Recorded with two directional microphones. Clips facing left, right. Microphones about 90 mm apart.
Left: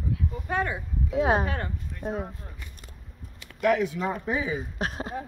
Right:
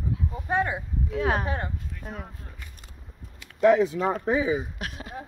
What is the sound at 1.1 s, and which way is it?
Speech, 20° left (ahead or behind).